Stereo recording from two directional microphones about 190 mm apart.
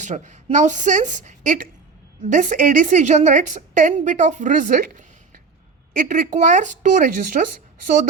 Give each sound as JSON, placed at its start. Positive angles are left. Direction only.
{"t": 0.0, "sound": "a woman's voice", "side_deg": -40}